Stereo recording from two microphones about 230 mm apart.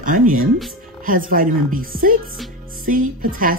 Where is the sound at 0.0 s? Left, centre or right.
Right.